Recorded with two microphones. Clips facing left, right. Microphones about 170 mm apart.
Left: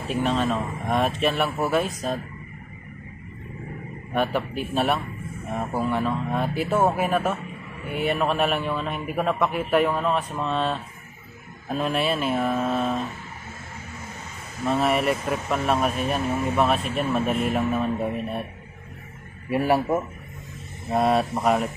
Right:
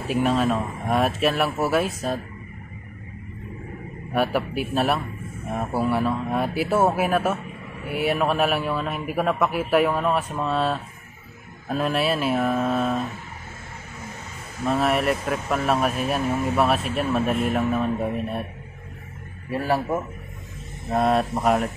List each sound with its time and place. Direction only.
0.1 s speech: 5° right (ahead or behind)
4.1 s speech: 5° right (ahead or behind)
14.7 s speech: centre (ahead or behind)
19.5 s a man's voice: 15° left (ahead or behind)
20.9 s speech: centre (ahead or behind)